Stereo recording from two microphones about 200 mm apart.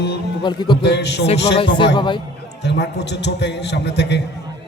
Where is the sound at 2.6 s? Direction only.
60° left (ahead or behind).